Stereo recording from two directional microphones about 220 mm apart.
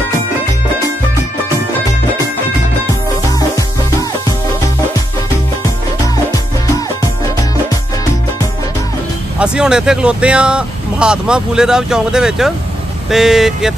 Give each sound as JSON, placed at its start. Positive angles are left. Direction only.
{"t": 3.3, "sound": "music", "side_deg": 15}
{"t": 9.4, "sound": "speech", "side_deg": -5}